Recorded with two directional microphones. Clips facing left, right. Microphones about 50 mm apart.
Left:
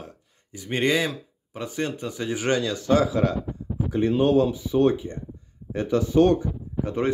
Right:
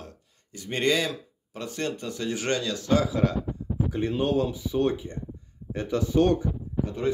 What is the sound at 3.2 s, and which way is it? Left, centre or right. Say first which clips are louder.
Speech: left 2 dB; left.